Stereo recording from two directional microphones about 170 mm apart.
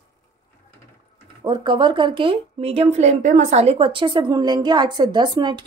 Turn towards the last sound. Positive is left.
turn(degrees=-25)  # may be behind; listen again after turning